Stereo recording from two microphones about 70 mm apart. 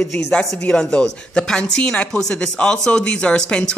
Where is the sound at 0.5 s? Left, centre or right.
Centre.